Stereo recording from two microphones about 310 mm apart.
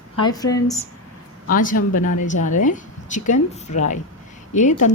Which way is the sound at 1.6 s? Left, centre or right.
Left.